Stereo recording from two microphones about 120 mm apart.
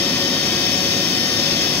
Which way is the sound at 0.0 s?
15° left (ahead or behind).